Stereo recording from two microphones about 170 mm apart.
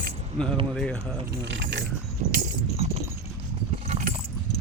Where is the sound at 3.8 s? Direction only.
40° right (ahead or behind).